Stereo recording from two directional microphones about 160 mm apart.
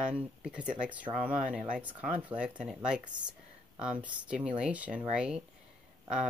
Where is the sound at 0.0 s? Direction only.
5° right (ahead or behind).